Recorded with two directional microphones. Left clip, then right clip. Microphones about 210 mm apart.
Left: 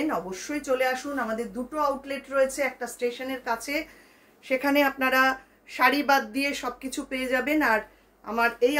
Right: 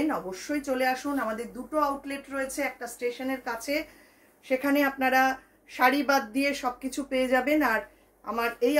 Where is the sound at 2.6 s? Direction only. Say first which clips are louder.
Left 3 dB; 15° left (ahead or behind).